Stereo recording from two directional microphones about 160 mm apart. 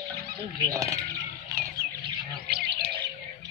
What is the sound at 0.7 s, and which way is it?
Speech, 20° right (ahead or behind).